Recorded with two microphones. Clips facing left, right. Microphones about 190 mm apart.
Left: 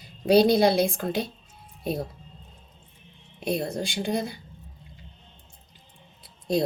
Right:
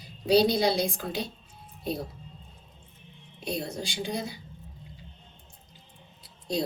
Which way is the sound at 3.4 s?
55° left (ahead or behind).